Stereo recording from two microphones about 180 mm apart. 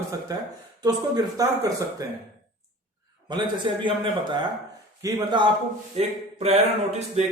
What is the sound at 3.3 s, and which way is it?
Speech, 25° right (ahead or behind).